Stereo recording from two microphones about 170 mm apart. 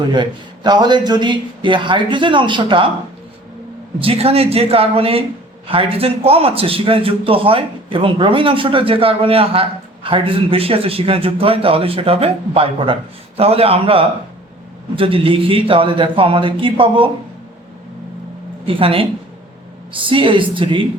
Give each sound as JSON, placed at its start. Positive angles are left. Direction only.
{"t": 0.1, "sound": "speech", "side_deg": -25}
{"t": 4.0, "sound": "a man's voice", "side_deg": -35}
{"t": 18.6, "sound": "a man's voice", "side_deg": -35}